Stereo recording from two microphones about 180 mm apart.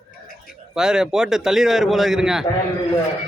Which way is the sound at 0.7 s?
5° right (ahead or behind).